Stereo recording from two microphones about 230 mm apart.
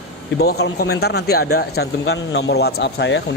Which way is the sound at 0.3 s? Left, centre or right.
Left.